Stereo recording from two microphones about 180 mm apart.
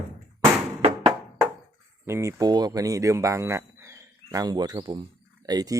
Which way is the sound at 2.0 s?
15° right (ahead or behind).